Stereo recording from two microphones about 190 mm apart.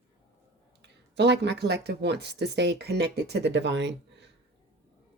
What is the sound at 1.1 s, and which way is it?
Speech, 65° right (ahead or behind).